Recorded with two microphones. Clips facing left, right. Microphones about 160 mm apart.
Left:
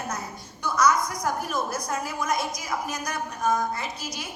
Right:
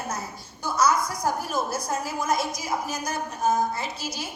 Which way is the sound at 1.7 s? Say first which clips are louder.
Right 1 dB; 30° right (ahead or behind).